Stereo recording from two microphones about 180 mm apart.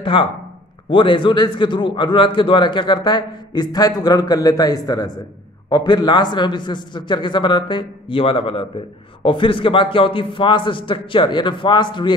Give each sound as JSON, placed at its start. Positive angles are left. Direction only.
{"t": 0.0, "sound": "a man's voice", "side_deg": 30}